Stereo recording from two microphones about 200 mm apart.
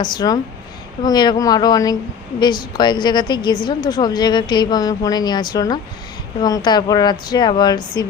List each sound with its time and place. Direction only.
0.0 s a woman's voice: 20° left (ahead or behind)